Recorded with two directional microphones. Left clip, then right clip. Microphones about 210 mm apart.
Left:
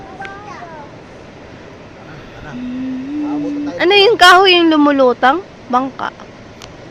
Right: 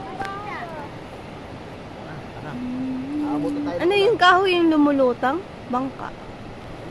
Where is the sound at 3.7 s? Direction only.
20° left (ahead or behind).